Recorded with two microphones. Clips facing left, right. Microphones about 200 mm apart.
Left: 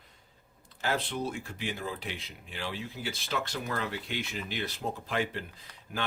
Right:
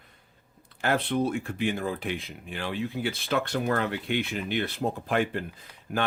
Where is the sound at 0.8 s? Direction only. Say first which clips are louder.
Right 6 dB; 55° right (ahead or behind).